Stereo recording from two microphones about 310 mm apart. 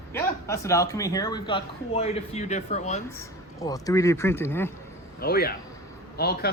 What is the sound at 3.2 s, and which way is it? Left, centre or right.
Speech, centre.